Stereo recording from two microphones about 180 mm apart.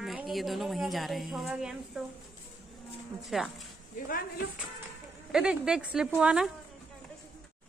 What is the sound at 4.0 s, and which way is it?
Speech, 45° left (ahead or behind).